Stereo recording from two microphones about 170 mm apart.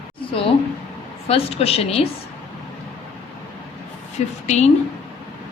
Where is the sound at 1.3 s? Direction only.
35° left (ahead or behind).